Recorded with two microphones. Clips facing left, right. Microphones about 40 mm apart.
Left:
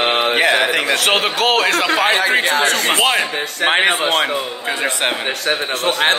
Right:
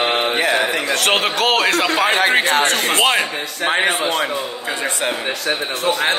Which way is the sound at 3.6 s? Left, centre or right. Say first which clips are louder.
Left 2 dB; left.